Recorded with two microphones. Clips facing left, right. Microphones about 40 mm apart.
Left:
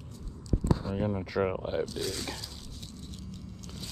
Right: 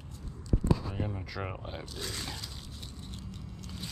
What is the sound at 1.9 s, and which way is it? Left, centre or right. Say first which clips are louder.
Speech: left 4 dB; centre.